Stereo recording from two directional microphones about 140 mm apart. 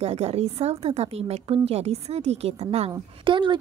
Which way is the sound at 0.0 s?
45° right (ahead or behind).